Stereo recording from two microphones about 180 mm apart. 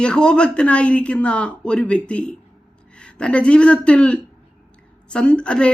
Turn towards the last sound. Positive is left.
turn(degrees=5)  # may be behind; listen again after turning